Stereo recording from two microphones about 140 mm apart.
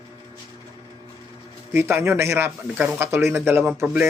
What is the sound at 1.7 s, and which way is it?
Speech, 15° right (ahead or behind).